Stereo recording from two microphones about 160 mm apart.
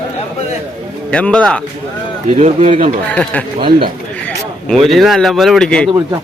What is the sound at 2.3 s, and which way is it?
Speech, 50° right (ahead or behind).